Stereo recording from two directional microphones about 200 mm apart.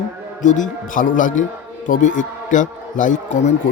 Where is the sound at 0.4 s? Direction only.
40° left (ahead or behind).